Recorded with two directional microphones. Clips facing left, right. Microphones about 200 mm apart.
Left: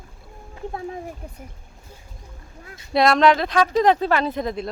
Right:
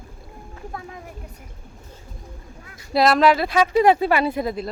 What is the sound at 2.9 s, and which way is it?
Speech, centre (ahead or behind).